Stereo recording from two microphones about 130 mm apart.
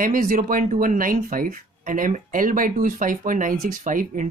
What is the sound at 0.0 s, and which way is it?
Speech, 90° right.